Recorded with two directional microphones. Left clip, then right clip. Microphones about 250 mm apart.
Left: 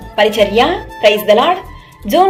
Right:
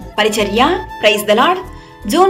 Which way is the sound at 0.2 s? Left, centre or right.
Centre.